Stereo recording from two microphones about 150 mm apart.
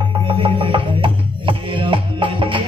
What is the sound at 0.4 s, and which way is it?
Music, 35° right (ahead or behind).